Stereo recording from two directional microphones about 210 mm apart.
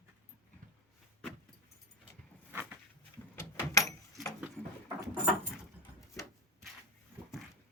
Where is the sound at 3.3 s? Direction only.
10° left (ahead or behind).